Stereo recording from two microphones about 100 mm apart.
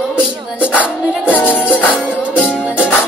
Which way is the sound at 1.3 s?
20° left (ahead or behind).